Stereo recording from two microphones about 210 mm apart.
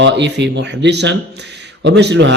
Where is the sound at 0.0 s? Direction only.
55° right (ahead or behind).